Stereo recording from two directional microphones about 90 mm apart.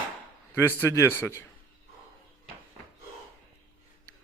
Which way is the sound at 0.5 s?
30° left (ahead or behind).